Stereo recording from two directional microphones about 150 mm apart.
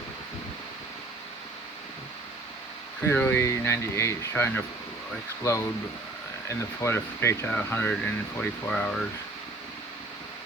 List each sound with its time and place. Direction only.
3.1 s speech: 15° left (ahead or behind)